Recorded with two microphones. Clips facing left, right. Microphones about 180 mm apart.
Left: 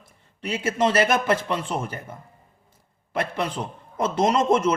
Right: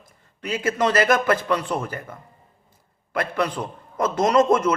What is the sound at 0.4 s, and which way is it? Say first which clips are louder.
Speech: right 1 dB; 25° left (ahead or behind).